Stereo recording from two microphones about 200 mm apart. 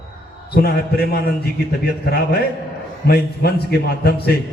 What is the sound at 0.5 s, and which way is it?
A man's voice, 50° left (ahead or behind).